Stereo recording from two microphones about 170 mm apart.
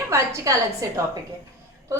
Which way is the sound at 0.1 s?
15° right (ahead or behind).